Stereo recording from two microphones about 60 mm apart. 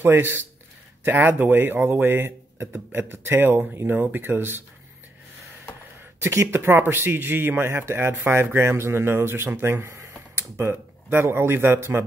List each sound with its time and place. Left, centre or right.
0.0 s speech: right
6.2 s speech: right
9.8 s speech: right